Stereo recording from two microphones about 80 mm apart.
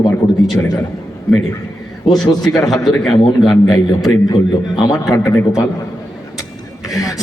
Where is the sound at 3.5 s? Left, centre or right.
Left.